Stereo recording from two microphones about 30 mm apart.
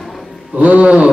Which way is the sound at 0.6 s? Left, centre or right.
Right.